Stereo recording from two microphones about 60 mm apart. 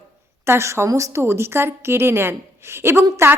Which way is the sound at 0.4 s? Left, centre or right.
Right.